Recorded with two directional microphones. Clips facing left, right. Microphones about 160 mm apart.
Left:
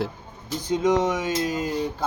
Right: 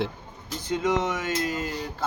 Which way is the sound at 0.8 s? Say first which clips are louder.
Left 4 dB; 15° left (ahead or behind).